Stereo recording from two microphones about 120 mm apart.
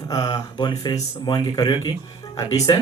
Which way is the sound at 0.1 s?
30° left (ahead or behind).